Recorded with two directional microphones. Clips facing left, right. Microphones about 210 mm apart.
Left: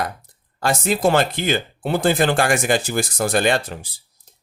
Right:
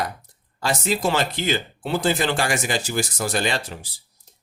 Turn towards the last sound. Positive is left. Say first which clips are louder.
# left 6 dB
turn(degrees=55)  # may be behind; listen again after turning